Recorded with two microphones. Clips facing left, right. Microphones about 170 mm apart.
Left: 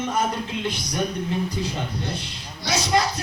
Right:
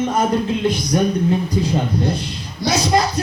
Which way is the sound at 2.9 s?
40° right (ahead or behind).